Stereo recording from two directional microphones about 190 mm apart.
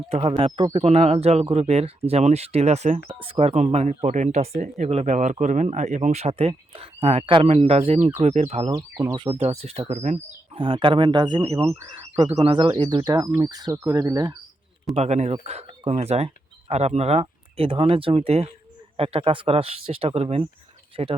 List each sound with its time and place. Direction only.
0.1 s speech: 30° right (ahead or behind)
8.7 s speech: 15° right (ahead or behind)
9.2 s speech: 30° right (ahead or behind)
14.9 s speech: 35° right (ahead or behind)